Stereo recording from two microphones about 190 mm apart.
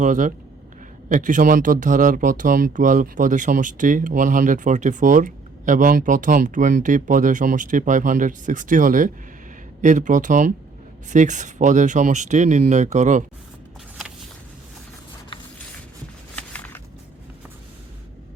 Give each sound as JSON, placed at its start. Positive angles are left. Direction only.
{"t": 0.0, "sound": "speech", "side_deg": -40}
{"t": 15.3, "sound": "mechanisms", "side_deg": 25}
{"t": 16.3, "sound": "a sound", "side_deg": 10}